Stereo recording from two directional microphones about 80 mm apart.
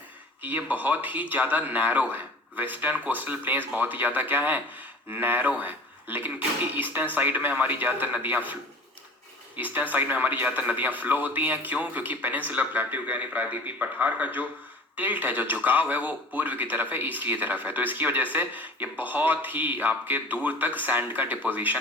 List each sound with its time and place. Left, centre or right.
0.4 s speech: right
9.6 s speech: right